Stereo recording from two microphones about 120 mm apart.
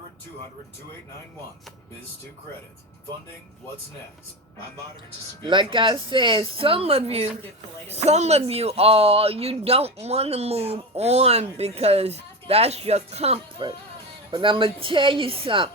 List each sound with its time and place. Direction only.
5.4 s speech: 40° right (ahead or behind); by 13.4 s 60° right (ahead or behind)
13.6 s speech: 45° right (ahead or behind)